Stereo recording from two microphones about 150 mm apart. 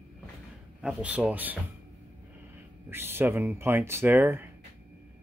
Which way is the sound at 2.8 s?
15° right (ahead or behind).